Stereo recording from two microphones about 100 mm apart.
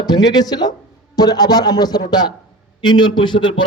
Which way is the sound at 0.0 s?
40° left (ahead or behind).